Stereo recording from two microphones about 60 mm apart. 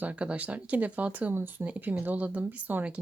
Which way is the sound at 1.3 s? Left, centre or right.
Right.